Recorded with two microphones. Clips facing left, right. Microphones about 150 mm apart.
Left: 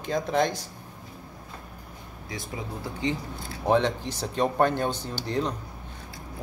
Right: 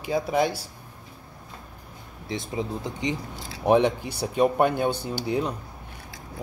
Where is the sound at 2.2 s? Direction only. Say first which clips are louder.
Right 6 dB; 25° right (ahead or behind).